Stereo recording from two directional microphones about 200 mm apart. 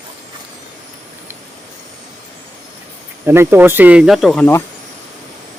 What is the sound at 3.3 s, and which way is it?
Speech, 10° right (ahead or behind).